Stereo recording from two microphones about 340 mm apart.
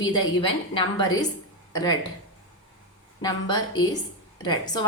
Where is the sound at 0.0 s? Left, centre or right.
Centre.